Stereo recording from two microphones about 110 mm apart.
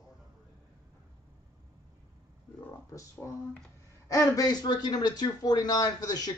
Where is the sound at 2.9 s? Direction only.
25° left (ahead or behind).